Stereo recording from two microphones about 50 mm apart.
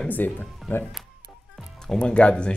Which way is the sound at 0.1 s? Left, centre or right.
Left.